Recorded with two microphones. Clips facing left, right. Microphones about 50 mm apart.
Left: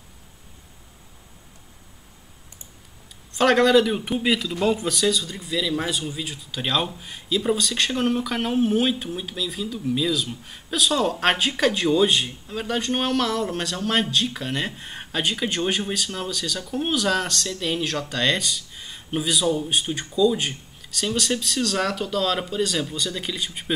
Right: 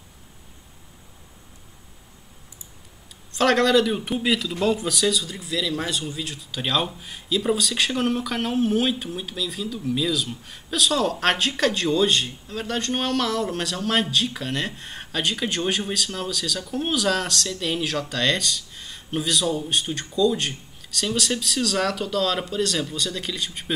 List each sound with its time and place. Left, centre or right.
3.3 s speech: centre